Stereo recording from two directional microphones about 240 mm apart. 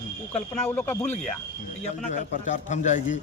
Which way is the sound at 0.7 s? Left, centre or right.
Centre.